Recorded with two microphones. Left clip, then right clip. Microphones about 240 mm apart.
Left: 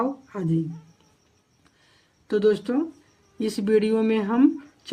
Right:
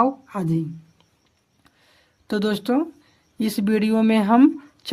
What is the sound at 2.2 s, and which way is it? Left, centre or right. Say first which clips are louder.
Speech: left 3 dB; right.